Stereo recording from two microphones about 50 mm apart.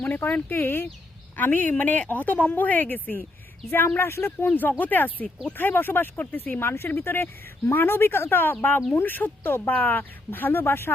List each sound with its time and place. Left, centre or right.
0.0 s speech: left
3.7 s speech: left
6.7 s speech: left